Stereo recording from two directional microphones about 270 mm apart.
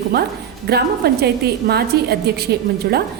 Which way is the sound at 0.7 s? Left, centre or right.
Right.